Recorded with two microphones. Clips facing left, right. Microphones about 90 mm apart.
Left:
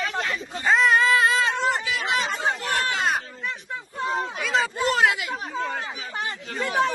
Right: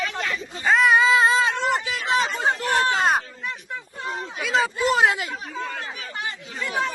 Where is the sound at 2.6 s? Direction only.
30° right (ahead or behind).